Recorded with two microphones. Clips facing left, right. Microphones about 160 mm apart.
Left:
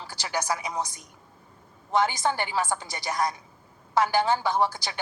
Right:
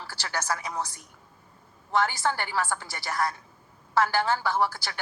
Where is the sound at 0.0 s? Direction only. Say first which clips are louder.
Left 3 dB; 15° left (ahead or behind).